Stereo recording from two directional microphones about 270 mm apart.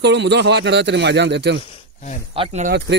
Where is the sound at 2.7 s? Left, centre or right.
Right.